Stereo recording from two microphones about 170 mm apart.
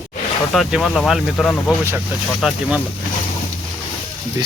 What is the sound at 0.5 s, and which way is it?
Speech, centre (ahead or behind).